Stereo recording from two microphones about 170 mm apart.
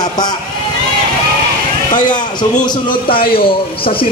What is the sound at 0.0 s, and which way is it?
Speech, 25° left (ahead or behind).